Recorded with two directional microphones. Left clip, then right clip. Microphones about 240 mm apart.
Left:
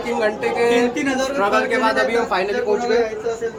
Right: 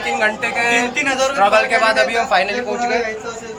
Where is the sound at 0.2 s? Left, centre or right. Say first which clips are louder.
Left 1 dB; centre.